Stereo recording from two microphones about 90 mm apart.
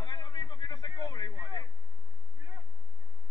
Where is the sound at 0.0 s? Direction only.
55° left (ahead or behind).